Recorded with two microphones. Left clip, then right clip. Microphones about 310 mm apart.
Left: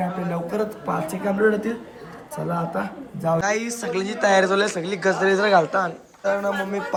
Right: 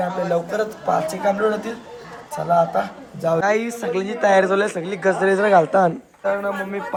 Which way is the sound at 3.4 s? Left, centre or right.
Centre.